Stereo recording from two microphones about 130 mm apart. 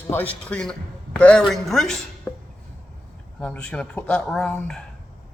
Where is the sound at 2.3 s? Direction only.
15° left (ahead or behind).